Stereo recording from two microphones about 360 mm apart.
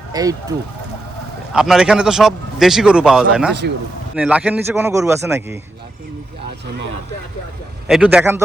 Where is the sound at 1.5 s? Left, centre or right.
Centre.